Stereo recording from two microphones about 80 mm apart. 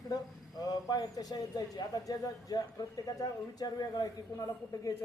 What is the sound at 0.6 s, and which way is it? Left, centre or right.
A woman's voice, left.